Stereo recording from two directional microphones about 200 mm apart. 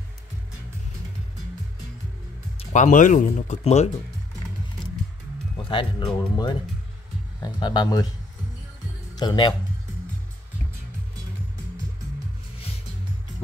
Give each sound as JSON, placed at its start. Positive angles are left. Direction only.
{"t": 2.7, "sound": "speech", "side_deg": 40}
{"t": 5.6, "sound": "speech", "side_deg": 25}
{"t": 9.1, "sound": "speech", "side_deg": 20}